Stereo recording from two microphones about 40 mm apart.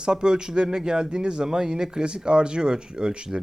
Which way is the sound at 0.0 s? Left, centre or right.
Centre.